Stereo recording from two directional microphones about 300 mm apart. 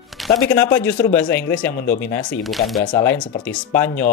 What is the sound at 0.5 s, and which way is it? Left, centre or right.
Speech, centre.